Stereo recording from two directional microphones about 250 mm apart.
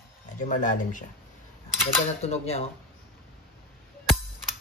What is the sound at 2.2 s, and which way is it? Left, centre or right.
Speech, left.